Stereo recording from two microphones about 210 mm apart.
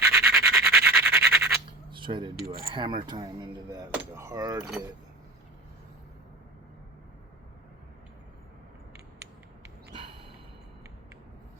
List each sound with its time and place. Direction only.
0.0 s scratch: 10° right (ahead or behind)
1.9 s cutlery: 25° right (ahead or behind)
2.7 s speech: 20° right (ahead or behind)